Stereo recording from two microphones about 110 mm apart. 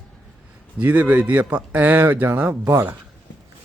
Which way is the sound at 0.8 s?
15° right (ahead or behind).